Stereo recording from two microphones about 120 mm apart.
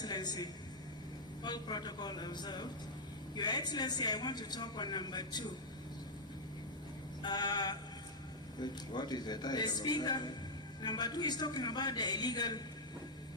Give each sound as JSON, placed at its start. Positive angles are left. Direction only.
{"t": 0.0, "sound": "a sound", "side_deg": 35}
{"t": 1.5, "sound": "a man's voice", "side_deg": 35}
{"t": 7.2, "sound": "a man's voice", "side_deg": 35}